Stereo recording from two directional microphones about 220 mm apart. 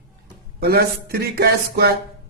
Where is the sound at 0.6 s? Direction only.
45° right (ahead or behind).